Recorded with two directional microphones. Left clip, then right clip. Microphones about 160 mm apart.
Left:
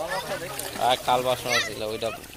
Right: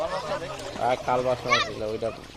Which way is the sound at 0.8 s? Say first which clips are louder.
Left 2 dB; 20° right (ahead or behind).